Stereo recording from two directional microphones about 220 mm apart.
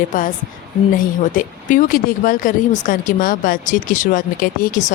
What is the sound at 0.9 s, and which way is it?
Speech, 35° left (ahead or behind).